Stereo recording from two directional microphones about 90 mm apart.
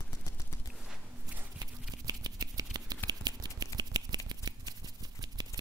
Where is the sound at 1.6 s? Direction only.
45° right (ahead or behind).